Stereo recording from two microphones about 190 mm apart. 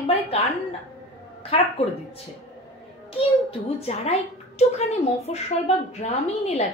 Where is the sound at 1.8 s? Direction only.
35° left (ahead or behind).